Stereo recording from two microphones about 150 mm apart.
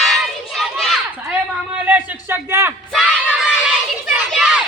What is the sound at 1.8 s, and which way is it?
Speech, 10° right (ahead or behind).